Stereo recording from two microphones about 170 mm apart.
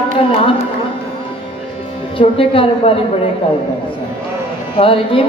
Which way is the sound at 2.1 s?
30° left (ahead or behind).